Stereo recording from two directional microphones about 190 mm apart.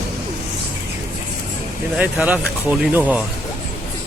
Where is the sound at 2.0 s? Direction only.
5° right (ahead or behind).